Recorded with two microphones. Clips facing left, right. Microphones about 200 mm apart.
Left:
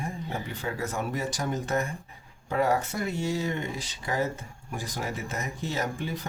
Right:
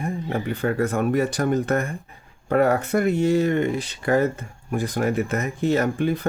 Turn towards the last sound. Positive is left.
turn(degrees=-60)  # may be behind; listen again after turning